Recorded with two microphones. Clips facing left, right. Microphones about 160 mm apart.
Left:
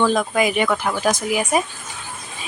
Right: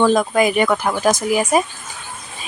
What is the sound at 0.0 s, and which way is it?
Speech, 40° right (ahead or behind).